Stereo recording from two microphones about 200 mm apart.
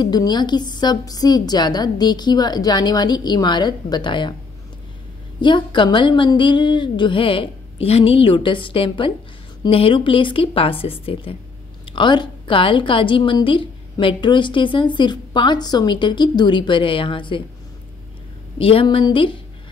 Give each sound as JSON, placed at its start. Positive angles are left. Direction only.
{"t": 0.0, "sound": "a woman's voice", "side_deg": 20}
{"t": 5.4, "sound": "a woman's voice", "side_deg": 25}
{"t": 18.6, "sound": "a woman's voice", "side_deg": 30}